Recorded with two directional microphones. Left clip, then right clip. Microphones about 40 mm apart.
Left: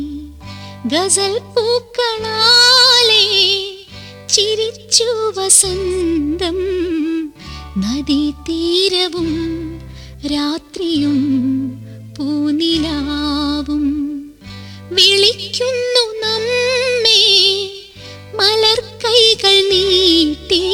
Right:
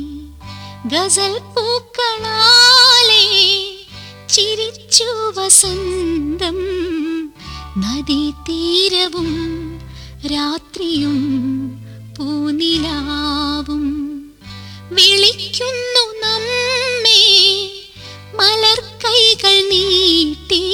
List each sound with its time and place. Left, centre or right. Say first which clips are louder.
0.9 s speech: left 1 dB; right
4.3 s music: left 1 dB; right